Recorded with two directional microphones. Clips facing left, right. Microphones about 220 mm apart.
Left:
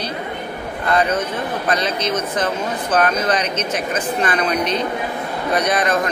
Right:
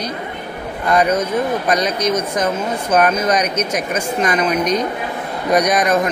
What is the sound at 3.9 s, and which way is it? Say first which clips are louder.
Speech: right 3 dB; 10° right (ahead or behind).